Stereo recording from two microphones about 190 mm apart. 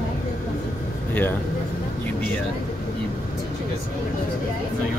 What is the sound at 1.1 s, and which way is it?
Speech, 10° left (ahead or behind).